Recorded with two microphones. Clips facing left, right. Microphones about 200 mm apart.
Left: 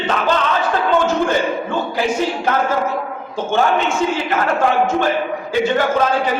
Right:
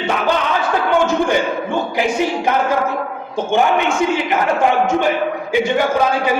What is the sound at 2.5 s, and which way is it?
A man's voice, 15° right (ahead or behind).